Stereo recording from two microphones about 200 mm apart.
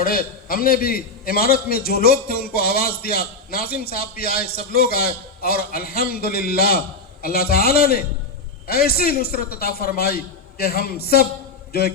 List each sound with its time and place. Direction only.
0.0 s a man's voice: 50° left (ahead or behind)